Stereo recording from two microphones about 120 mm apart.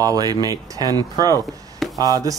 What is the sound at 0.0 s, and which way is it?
Speech, 30° right (ahead or behind).